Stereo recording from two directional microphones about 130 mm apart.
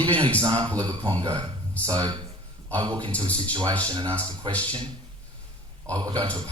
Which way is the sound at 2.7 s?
40° right (ahead or behind).